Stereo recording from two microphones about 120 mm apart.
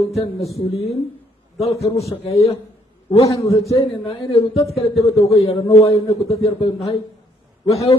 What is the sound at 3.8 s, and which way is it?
Speech, 55° left (ahead or behind).